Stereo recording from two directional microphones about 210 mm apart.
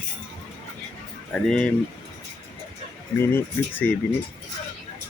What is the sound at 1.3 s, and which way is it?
Speech, 5° left (ahead or behind).